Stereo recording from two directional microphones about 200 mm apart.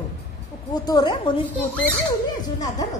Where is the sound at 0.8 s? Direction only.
20° left (ahead or behind).